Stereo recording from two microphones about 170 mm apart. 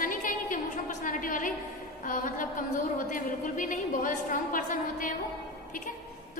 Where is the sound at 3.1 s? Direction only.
50° left (ahead or behind).